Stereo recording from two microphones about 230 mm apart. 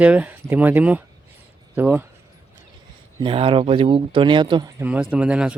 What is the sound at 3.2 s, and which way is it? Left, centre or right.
Speech, right.